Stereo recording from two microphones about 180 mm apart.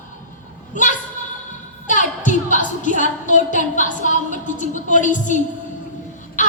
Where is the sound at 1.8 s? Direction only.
45° left (ahead or behind).